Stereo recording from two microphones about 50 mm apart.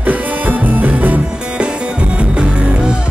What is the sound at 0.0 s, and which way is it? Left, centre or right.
Music, right.